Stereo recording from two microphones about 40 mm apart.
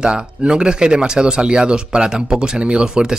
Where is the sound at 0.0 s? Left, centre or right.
Right.